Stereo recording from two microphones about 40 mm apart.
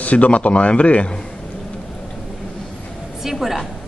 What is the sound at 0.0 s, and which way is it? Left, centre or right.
A man's voice, left.